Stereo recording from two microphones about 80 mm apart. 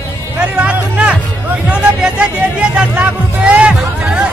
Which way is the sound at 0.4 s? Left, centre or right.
Centre.